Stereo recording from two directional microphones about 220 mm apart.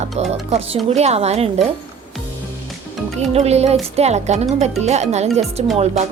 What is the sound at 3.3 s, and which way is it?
Speech, 30° right (ahead or behind).